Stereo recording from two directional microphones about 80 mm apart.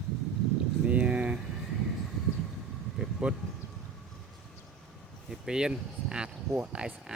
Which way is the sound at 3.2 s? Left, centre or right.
Centre.